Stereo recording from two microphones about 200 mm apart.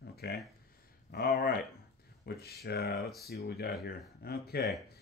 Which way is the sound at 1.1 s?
50° left (ahead or behind).